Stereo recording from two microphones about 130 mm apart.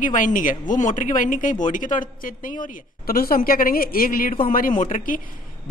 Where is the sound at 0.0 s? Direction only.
90° left.